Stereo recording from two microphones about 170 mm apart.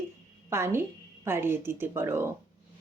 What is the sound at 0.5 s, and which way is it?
Speech, 15° right (ahead or behind).